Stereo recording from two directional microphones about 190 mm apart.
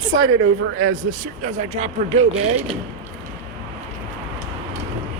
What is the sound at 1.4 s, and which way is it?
Speech, 40° right (ahead or behind).